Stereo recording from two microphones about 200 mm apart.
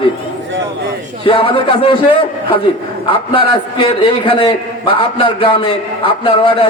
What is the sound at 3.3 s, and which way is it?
A man's voice, 25° left (ahead or behind).